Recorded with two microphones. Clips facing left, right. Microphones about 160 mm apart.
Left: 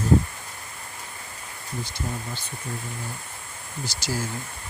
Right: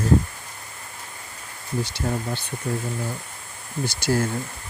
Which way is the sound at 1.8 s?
75° right (ahead or behind).